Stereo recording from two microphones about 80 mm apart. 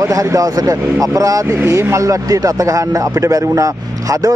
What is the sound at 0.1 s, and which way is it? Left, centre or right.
Speech, right.